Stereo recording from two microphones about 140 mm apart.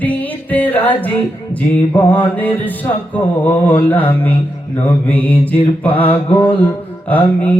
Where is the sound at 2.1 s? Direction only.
10° left (ahead or behind).